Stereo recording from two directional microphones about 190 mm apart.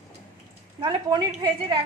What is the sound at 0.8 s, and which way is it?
Speech, 20° right (ahead or behind).